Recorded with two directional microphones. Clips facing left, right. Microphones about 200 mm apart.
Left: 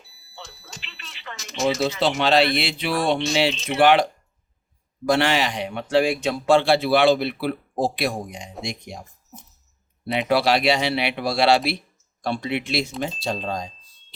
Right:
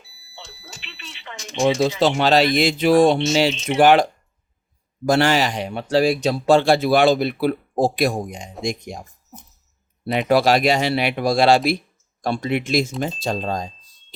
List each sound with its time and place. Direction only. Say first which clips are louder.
2.0 s a man's voice: right 1 dB; 45° right (ahead or behind)
5.0 s a man's voice: right 3 dB; 45° right (ahead or behind)
10.2 s a man's voice: right 3 dB; 45° right (ahead or behind)